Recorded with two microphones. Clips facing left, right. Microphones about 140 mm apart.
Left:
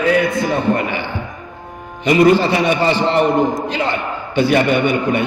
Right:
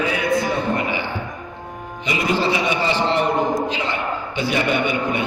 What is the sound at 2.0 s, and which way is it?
A man's voice, 55° left (ahead or behind).